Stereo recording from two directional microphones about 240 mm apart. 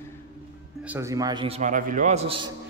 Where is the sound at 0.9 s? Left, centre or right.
Centre.